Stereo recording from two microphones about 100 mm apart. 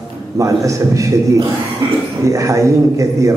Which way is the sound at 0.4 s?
35° right (ahead or behind).